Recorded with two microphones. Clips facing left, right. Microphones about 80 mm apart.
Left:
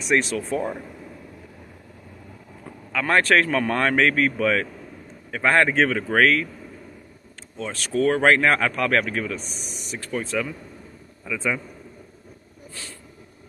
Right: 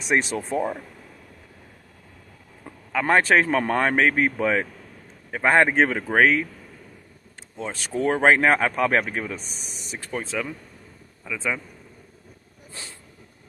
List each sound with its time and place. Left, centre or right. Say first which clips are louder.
0.4 s speech: even; centre
2.9 s speech: right 1 dB; centre
7.5 s a man's voice: left 3 dB; centre